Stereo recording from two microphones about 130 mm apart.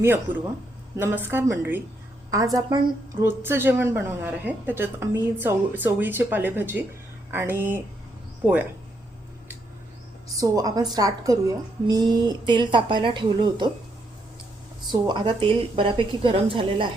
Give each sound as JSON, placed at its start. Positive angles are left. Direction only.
{"t": 0.0, "sound": "a woman's voice", "side_deg": -15}
{"t": 2.3, "sound": "a woman's voice", "side_deg": -25}
{"t": 3.2, "sound": "a woman's voice", "side_deg": -15}
{"t": 10.4, "sound": "a woman's voice", "side_deg": -30}
{"t": 15.0, "sound": "a woman's voice", "side_deg": -35}